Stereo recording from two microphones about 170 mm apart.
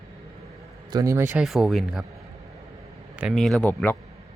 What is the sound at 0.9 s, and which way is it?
Speech, 20° right (ahead or behind).